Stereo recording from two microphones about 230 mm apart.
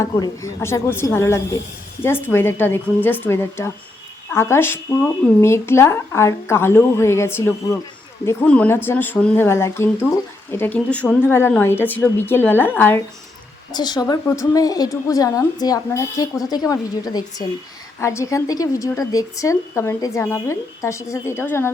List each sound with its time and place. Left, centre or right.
0.0 s speech: centre